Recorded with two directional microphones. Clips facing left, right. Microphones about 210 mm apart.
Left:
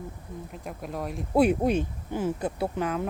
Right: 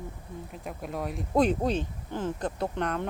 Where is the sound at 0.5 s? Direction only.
Centre (ahead or behind).